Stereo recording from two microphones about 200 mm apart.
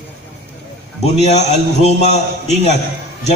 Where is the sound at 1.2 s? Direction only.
35° left (ahead or behind).